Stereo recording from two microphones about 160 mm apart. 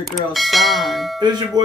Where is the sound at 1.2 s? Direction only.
25° right (ahead or behind).